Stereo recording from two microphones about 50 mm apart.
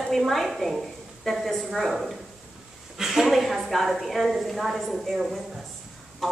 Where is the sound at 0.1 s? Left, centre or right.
Centre.